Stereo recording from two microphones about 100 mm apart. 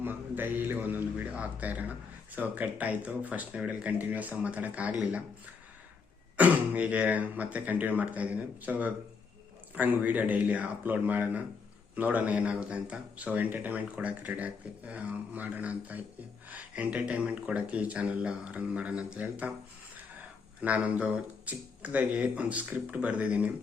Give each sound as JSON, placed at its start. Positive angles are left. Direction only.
{"t": 0.0, "sound": "a man's voice", "side_deg": -20}
{"t": 6.3, "sound": "a man's voice", "side_deg": -15}
{"t": 20.6, "sound": "a man's voice", "side_deg": -15}